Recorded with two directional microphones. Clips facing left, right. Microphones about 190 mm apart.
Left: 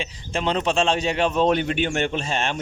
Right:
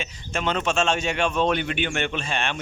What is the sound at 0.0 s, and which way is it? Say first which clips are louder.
A man's voice: left 2 dB; 30° left (ahead or behind).